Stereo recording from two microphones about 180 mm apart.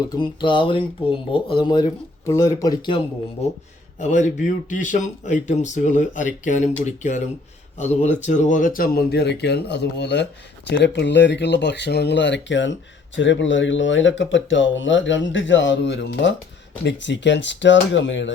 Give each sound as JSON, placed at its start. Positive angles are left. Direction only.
{"t": 0.1, "sound": "speech", "side_deg": 25}
{"t": 4.0, "sound": "a man's voice", "side_deg": 40}